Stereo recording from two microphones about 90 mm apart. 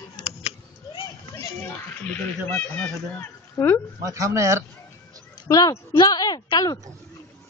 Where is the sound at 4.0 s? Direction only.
40° right (ahead or behind).